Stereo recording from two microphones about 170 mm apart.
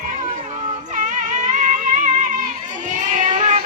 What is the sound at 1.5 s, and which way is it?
Music, 45° right (ahead or behind).